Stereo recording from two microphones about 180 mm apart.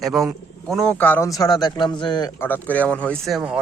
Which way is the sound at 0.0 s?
Centre (ahead or behind).